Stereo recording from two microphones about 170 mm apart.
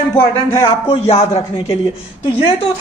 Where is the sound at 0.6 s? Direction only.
35° left (ahead or behind).